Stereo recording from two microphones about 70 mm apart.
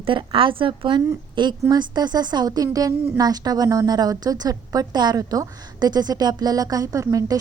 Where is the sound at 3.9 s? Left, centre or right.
Right.